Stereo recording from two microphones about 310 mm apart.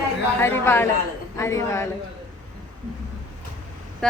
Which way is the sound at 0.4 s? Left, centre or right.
Centre.